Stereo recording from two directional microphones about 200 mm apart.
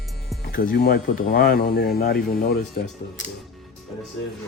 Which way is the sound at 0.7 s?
50° left (ahead or behind).